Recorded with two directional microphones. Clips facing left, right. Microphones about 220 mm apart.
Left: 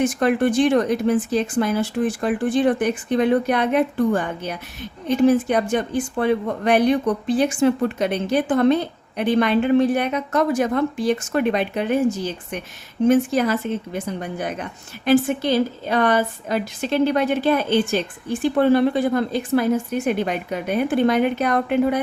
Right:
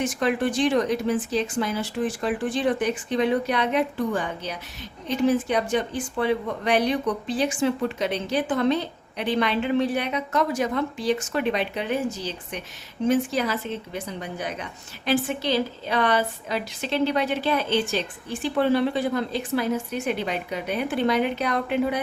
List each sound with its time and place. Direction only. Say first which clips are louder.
0.0 s speech: left 5 dB; 50° left (ahead or behind)